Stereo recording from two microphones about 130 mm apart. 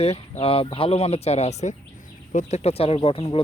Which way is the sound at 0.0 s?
50° left (ahead or behind).